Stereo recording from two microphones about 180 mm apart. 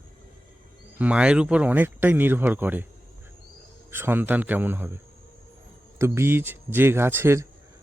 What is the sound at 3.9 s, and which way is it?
Speech, 10° right (ahead or behind).